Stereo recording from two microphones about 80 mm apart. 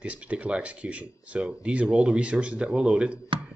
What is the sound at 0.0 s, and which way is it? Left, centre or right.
Speech, centre.